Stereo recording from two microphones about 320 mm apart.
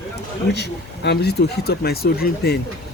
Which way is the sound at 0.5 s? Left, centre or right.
Left.